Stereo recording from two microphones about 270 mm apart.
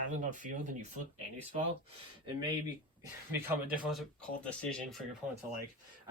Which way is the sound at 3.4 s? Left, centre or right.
Centre.